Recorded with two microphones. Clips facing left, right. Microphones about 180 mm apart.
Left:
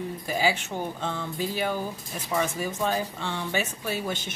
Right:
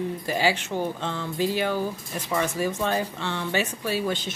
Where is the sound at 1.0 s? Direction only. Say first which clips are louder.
Right 1 dB; 10° left (ahead or behind).